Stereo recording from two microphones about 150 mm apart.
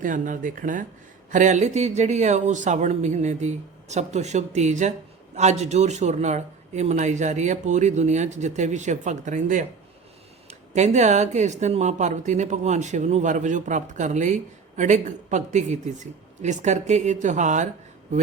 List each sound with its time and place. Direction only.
0.0 s speech: 60° right (ahead or behind)
10.8 s speech: 50° right (ahead or behind)